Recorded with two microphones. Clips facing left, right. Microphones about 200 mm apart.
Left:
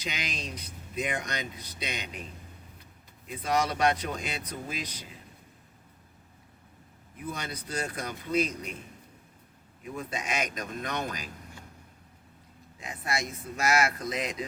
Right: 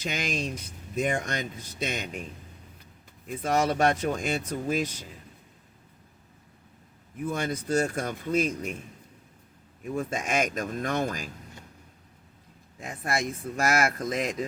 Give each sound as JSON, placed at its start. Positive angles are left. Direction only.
{"t": 0.0, "sound": "speech", "side_deg": -50}
{"t": 3.2, "sound": "speech", "side_deg": -50}
{"t": 7.3, "sound": "speech", "side_deg": -50}
{"t": 9.8, "sound": "speech", "side_deg": -45}
{"t": 12.8, "sound": "speech", "side_deg": -50}